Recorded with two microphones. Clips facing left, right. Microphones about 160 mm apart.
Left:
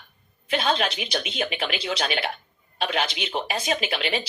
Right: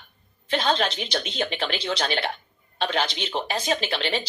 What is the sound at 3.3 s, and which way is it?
Speech, 5° left (ahead or behind).